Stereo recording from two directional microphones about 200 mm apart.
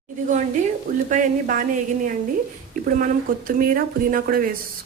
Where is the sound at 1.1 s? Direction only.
40° right (ahead or behind).